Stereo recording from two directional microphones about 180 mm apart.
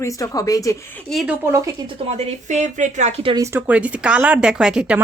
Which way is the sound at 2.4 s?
45° right (ahead or behind).